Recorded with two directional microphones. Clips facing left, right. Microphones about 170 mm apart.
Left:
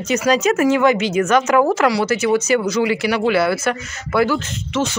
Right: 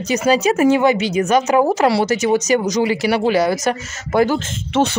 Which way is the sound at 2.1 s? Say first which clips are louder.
Right 1 dB; 40° right (ahead or behind).